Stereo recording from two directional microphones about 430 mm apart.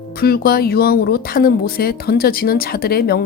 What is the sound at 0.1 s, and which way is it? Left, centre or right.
Speech, left.